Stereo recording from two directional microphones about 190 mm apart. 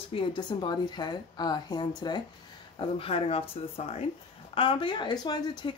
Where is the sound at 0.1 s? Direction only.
25° left (ahead or behind).